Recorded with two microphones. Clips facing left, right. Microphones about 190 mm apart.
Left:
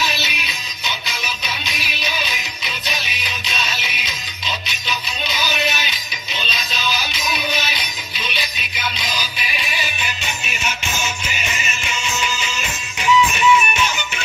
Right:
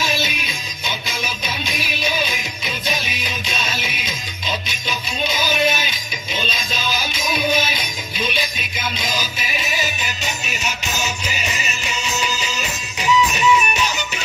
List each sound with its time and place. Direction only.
0.0 s music: 50° right (ahead or behind)